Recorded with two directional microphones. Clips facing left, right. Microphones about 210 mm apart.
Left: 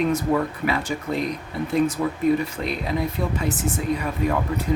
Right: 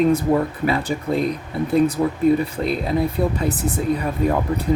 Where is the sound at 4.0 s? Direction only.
35° right (ahead or behind).